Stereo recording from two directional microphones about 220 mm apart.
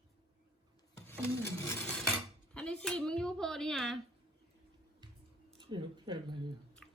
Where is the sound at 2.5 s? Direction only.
5° left (ahead or behind).